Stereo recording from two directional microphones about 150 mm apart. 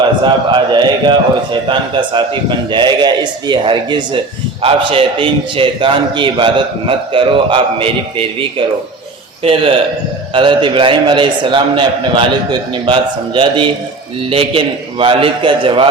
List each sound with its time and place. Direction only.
0.3 s a man's voice: 30° right (ahead or behind)